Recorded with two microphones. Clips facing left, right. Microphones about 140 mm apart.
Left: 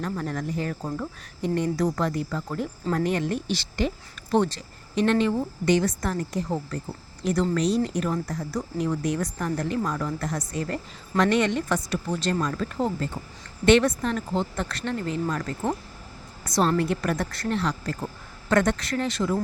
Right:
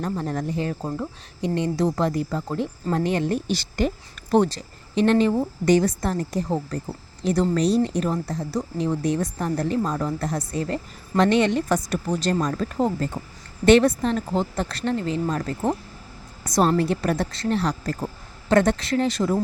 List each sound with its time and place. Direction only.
0.0 s speech: 35° right (ahead or behind)
3.3 s speech: 45° right (ahead or behind)
16.5 s a woman's voice: 45° right (ahead or behind)
16.7 s speech: 30° right (ahead or behind)
17.5 s speech: 40° right (ahead or behind)